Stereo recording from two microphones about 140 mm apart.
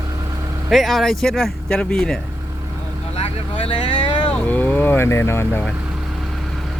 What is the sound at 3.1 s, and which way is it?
Speech, 45° left (ahead or behind).